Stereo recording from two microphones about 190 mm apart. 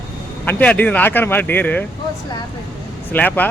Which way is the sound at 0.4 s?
5° left (ahead or behind).